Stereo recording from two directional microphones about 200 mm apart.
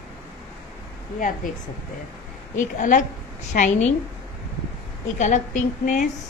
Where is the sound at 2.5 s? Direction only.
40° left (ahead or behind).